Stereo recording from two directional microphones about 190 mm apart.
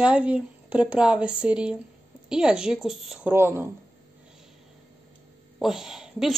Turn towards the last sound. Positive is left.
turn(degrees=-5)  # may be behind; listen again after turning